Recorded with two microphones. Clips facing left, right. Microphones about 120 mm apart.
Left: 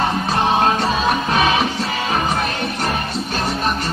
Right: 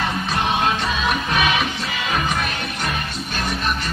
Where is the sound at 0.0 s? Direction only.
35° left (ahead or behind).